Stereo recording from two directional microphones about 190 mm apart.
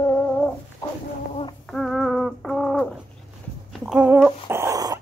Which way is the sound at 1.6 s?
Centre (ahead or behind).